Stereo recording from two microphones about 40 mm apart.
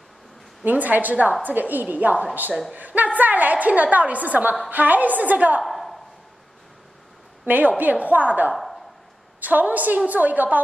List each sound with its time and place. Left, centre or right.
0.7 s a woman's voice: right
5.6 s a sound: centre
7.4 s a woman's voice: right